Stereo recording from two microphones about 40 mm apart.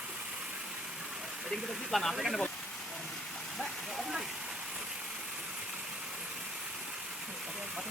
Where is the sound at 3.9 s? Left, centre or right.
Centre.